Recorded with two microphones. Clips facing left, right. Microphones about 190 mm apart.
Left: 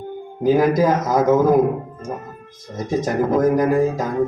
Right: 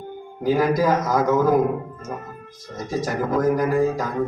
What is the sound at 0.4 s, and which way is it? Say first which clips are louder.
Speech: left 4 dB; 20° left (ahead or behind).